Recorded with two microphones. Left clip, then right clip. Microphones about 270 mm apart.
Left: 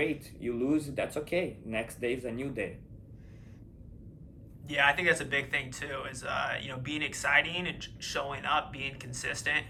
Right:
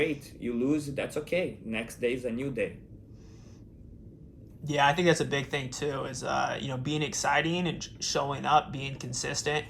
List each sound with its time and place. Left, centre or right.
0.0 s speech: centre
4.6 s speech: centre